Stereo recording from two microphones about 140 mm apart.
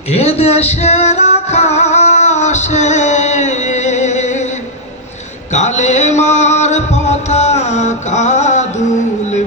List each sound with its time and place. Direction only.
0.1 s music: 50° left (ahead or behind)
5.5 s music: 55° left (ahead or behind)